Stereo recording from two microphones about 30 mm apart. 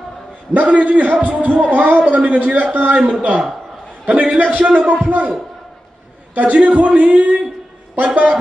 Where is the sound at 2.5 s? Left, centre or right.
Right.